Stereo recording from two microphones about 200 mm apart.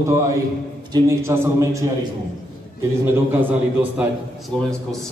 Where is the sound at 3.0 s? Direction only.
10° right (ahead or behind).